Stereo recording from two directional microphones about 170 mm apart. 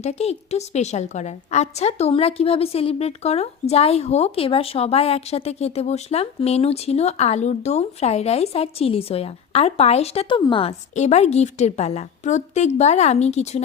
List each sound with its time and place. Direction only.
0.0 s a woman's voice: 40° left (ahead or behind)